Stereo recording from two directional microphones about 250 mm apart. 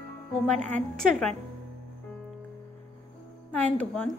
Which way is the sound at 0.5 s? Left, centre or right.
Right.